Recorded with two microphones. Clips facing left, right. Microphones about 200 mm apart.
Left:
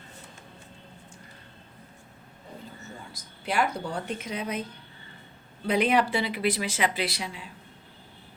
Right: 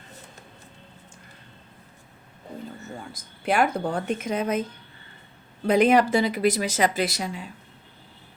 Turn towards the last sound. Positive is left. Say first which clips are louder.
# right 5 dB
turn(degrees=-45)  # may be behind; listen again after turning